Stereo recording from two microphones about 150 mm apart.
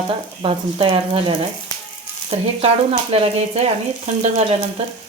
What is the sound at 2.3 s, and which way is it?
Frying, 40° right (ahead or behind).